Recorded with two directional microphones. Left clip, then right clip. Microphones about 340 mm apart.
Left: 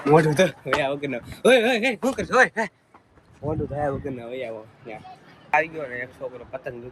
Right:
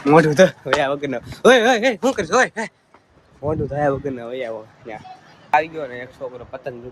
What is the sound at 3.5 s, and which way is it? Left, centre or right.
Speech, right.